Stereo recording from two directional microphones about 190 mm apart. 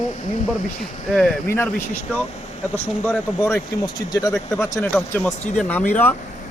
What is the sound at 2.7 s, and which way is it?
Speech, 10° left (ahead or behind).